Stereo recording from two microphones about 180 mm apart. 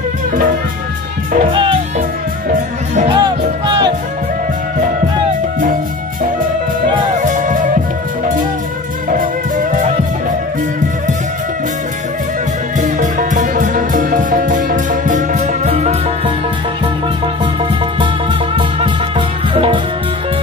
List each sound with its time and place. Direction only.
1.5 s music: 25° right (ahead or behind)
3.1 s music: 25° right (ahead or behind)
7.2 s music: 45° right (ahead or behind)
9.1 s music: 45° right (ahead or behind)
12.7 s music: 45° right (ahead or behind)
18.6 s music: 30° right (ahead or behind)